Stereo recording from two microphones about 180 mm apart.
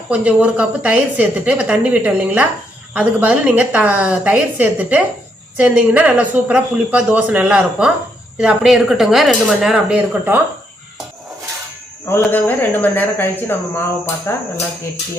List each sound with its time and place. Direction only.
0.1 s a woman's voice: 5° right (ahead or behind)
12.0 s a woman's voice: 10° left (ahead or behind)